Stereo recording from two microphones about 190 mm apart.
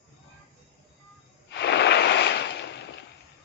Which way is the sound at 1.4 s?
65° left (ahead or behind).